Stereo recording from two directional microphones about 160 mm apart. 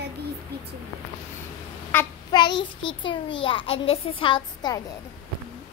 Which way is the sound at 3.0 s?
30° left (ahead or behind).